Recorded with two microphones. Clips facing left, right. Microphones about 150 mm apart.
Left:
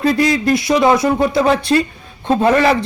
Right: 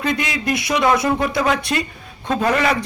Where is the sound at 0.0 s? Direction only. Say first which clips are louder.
Left 8 dB; 35° left (ahead or behind).